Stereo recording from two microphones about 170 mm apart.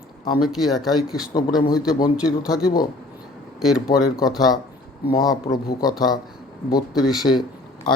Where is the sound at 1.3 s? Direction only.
25° left (ahead or behind).